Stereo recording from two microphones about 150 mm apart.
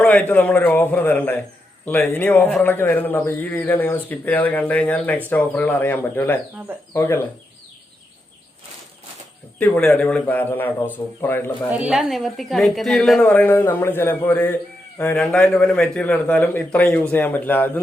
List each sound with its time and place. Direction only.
0.0 s speech: 10° left (ahead or behind)
9.6 s speech: 10° left (ahead or behind)
11.7 s a woman's voice: 10° right (ahead or behind); by 17.7 s 15° left (ahead or behind)